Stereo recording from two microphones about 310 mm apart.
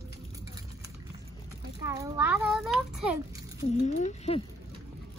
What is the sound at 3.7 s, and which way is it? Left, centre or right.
Speech, left.